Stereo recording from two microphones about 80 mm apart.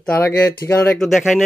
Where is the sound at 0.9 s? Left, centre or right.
Centre.